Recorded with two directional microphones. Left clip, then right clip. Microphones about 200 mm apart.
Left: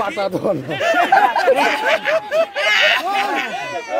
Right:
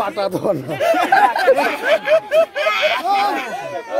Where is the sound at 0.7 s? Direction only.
50° right (ahead or behind).